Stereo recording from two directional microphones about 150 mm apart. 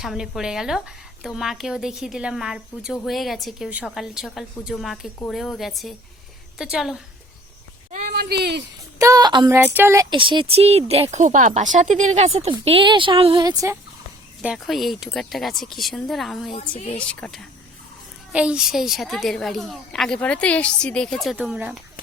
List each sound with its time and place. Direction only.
0.0 s speech: centre (ahead or behind)
7.9 s a sound: 90° right
9.0 s speech: 25° right (ahead or behind)
9.5 s speech: 15° right (ahead or behind)
10.2 s speech: 35° right (ahead or behind)
14.4 s speech: 5° right (ahead or behind)
16.6 s speech: 45° left (ahead or behind)
17.1 s speech: 5° left (ahead or behind)
18.3 s speech: 5° right (ahead or behind)
21.3 s speech: 10° right (ahead or behind)